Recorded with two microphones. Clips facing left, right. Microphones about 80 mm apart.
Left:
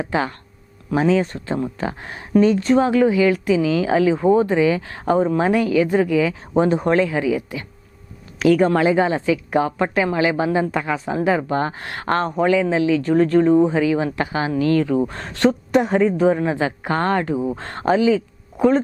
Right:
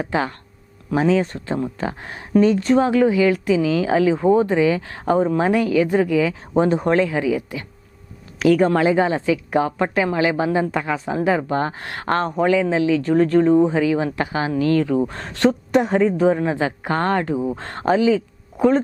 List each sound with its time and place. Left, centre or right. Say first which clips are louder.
0.0 s a woman's voice: even; centre